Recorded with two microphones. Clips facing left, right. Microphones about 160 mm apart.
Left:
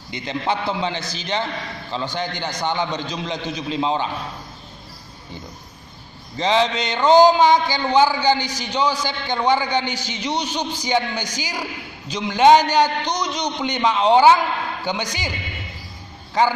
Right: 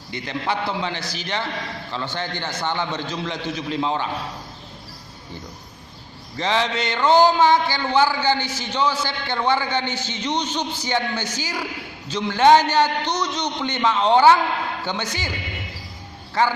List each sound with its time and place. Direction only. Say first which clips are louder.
0.1 s a man's voice: left 2 dB; 20° left (ahead or behind)
6.3 s a man's voice: left 3 dB; 20° left (ahead or behind)
16.4 s a man's voice: left 2 dB; 15° left (ahead or behind)